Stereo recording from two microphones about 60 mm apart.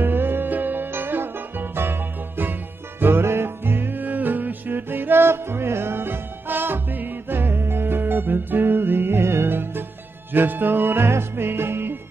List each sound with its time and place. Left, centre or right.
0.0 s music: right
4.0 s music: right